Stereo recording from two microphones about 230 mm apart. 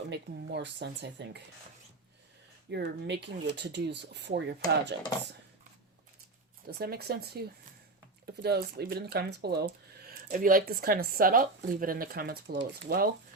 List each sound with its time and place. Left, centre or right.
0.1 s speech: right
2.6 s speech: right
6.7 s speech: right